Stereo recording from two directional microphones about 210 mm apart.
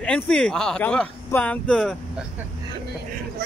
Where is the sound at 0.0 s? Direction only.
5° left (ahead or behind).